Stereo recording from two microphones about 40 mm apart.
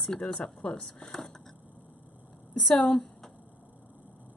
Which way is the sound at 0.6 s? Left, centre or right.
Left.